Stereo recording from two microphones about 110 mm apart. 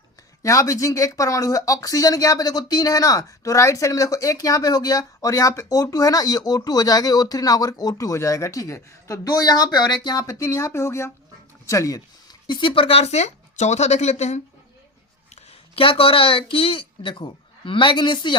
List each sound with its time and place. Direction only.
0.4 s speech: 30° left (ahead or behind)
12.5 s speech: 45° left (ahead or behind); by 14.4 s 90° left
15.7 s speech: 55° left (ahead or behind)